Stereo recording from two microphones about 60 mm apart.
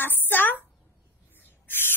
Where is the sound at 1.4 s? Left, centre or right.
Left.